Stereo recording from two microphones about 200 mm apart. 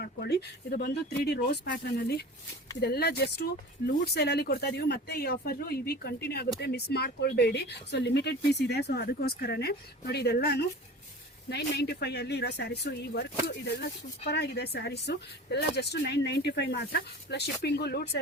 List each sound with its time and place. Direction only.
0.0 s speech: 55° left (ahead or behind)